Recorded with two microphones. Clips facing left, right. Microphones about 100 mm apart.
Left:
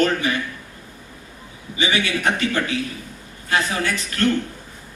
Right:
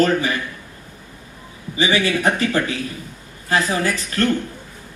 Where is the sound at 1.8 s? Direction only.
35° right (ahead or behind).